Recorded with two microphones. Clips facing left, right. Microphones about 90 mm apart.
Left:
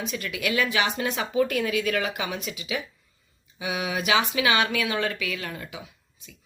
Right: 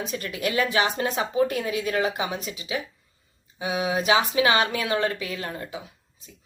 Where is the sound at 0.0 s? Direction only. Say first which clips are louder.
Right 1 dB; 35° right (ahead or behind).